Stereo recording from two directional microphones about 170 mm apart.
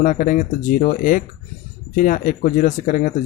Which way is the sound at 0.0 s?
50° left (ahead or behind).